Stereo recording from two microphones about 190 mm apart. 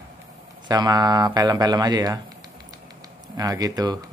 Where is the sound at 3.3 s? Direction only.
20° right (ahead or behind).